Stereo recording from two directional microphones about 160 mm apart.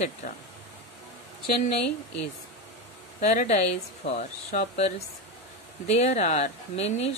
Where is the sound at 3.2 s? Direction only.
45° left (ahead or behind).